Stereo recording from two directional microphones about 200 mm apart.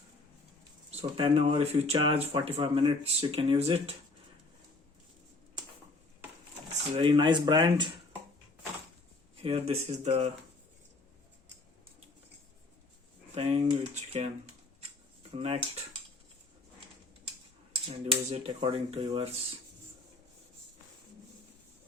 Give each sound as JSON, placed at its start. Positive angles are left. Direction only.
{"t": 0.9, "sound": "speech", "side_deg": -30}
{"t": 6.9, "sound": "speech", "side_deg": -25}
{"t": 9.4, "sound": "speech", "side_deg": -30}
{"t": 13.3, "sound": "speech", "side_deg": -30}
{"t": 15.4, "sound": "speech", "side_deg": -30}
{"t": 18.0, "sound": "speech", "side_deg": -30}